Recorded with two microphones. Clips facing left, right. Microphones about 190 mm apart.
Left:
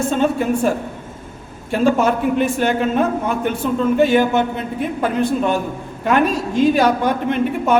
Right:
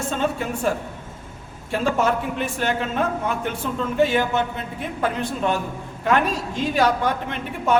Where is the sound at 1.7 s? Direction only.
15° left (ahead or behind).